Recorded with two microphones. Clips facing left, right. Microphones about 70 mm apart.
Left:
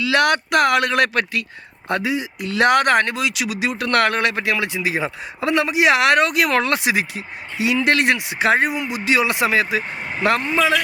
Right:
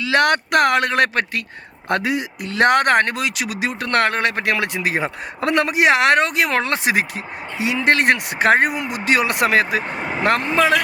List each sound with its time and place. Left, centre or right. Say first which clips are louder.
0.0 s speech: even; right
1.9 s speech: right 1 dB; right
2.5 s speech: even; right
5.9 s speech: left 1 dB; right